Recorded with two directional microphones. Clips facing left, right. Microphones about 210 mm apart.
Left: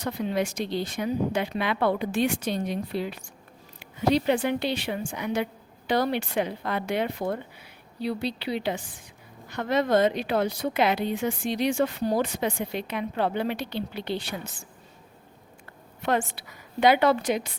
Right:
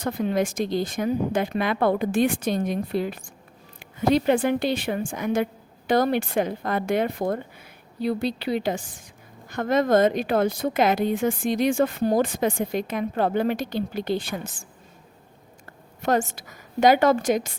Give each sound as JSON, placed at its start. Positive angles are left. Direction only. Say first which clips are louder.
{"t": 0.0, "sound": "a woman's voice", "louder": "right 3 dB", "side_deg": -50}
{"t": 16.0, "sound": "a woman's voice", "louder": "right 3 dB", "side_deg": -45}